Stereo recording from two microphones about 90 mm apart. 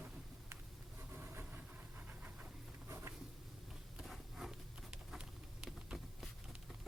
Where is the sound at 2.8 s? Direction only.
30° right (ahead or behind).